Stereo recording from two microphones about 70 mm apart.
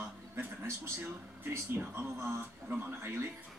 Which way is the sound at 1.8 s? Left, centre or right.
Right.